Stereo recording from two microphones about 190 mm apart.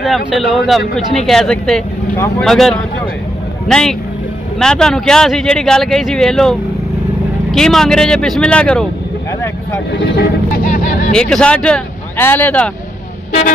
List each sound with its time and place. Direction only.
0.0 s speech: centre (ahead or behind)
7.5 s speech: 5° left (ahead or behind)
9.9 s speech: 50° left (ahead or behind)
11.1 s speech: 5° left (ahead or behind)